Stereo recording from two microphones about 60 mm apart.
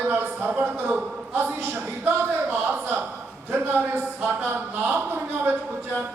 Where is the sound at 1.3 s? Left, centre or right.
Right.